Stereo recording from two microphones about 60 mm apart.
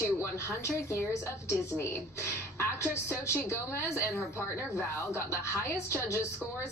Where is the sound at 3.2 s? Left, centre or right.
Left.